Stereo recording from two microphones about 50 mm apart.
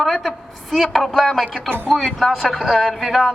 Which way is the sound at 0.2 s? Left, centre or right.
Centre.